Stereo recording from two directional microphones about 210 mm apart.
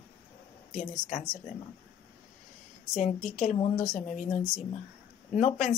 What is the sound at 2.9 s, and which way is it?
Speech, 35° left (ahead or behind).